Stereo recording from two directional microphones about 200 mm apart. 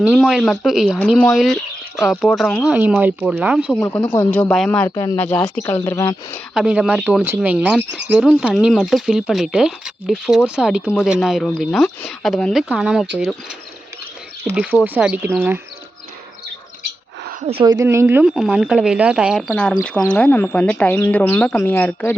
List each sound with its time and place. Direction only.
0.1 s speech: centre (ahead or behind)
3.8 s speech: 15° left (ahead or behind)
4.3 s speech: 5° left (ahead or behind)
6.5 s speech: 5° right (ahead or behind)
14.5 s speech: 5° right (ahead or behind)
17.4 s a woman's voice: 25° right (ahead or behind)
17.8 s speech: 10° right (ahead or behind)
19.5 s speech: 5° left (ahead or behind)